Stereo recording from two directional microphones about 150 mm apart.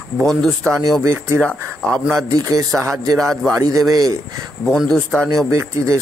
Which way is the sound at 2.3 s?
25° right (ahead or behind).